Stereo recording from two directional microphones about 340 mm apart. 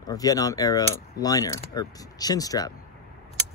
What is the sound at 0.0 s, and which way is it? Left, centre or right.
Speech, centre.